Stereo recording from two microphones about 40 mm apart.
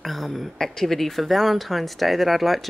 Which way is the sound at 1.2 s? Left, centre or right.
Centre.